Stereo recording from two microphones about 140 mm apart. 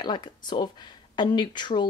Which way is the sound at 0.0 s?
30° left (ahead or behind).